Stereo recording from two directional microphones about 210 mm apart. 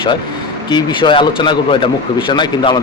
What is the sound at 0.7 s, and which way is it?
Speech, 20° left (ahead or behind).